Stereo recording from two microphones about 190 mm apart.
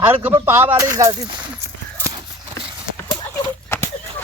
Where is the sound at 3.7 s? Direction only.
15° left (ahead or behind).